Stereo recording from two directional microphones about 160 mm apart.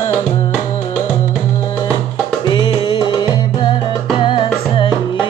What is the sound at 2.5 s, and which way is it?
Music, 30° left (ahead or behind).